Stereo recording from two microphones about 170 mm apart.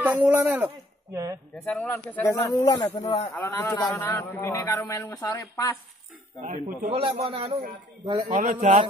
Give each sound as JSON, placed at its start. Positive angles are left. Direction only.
{"t": 0.0, "sound": "a man's voice", "side_deg": -10}
{"t": 1.5, "sound": "a man's voice", "side_deg": 5}
{"t": 3.3, "sound": "a man's voice", "side_deg": 10}
{"t": 6.4, "sound": "a man's voice", "side_deg": -45}
{"t": 7.0, "sound": "a man's voice", "side_deg": -30}
{"t": 8.3, "sound": "a man's voice", "side_deg": -50}